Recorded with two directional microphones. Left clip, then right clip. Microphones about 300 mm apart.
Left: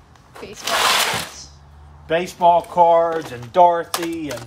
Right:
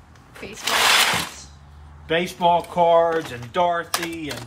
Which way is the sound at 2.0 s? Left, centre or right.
Centre.